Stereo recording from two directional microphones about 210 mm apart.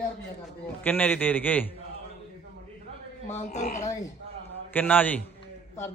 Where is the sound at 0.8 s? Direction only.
10° left (ahead or behind).